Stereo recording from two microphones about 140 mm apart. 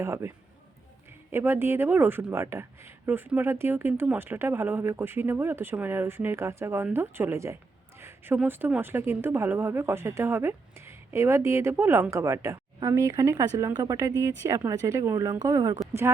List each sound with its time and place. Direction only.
0.0 s a woman's voice: 20° right (ahead or behind)